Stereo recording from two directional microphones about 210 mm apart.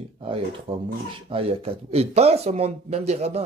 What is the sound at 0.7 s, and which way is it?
Speech, 25° right (ahead or behind).